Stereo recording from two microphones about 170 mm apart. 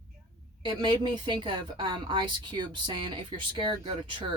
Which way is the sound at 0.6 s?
25° right (ahead or behind).